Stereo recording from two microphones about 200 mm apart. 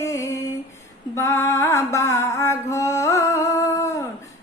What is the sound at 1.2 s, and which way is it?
Mantra, 15° left (ahead or behind).